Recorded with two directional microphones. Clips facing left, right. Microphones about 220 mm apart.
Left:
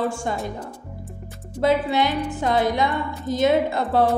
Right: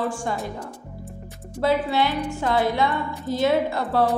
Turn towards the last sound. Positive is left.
turn(degrees=20)  # may be behind; listen again after turning